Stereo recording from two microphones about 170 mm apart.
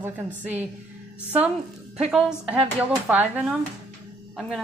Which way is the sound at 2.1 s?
5° right (ahead or behind).